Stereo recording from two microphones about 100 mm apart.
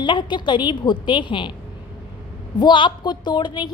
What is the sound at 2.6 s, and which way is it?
A woman's voice, 50° left (ahead or behind).